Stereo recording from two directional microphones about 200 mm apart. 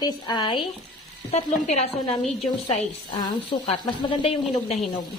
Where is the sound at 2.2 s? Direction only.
Centre (ahead or behind).